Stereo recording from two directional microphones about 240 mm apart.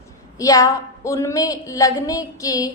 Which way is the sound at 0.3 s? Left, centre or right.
Centre.